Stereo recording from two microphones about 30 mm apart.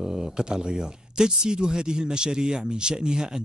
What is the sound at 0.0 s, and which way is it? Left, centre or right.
Speech, right.